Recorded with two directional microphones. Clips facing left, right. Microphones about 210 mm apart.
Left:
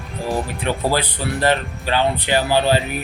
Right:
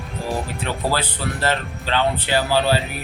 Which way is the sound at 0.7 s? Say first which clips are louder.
Left 4 dB; 15° left (ahead or behind).